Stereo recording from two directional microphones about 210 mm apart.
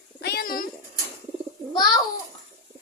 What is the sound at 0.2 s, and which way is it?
Bird, 50° left (ahead or behind).